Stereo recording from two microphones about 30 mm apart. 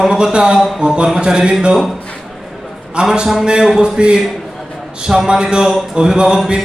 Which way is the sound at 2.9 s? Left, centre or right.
Right.